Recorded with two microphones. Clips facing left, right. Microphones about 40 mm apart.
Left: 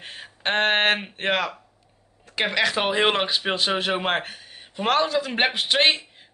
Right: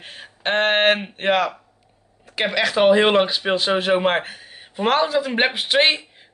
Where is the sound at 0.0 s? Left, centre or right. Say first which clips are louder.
Right 2 dB; centre.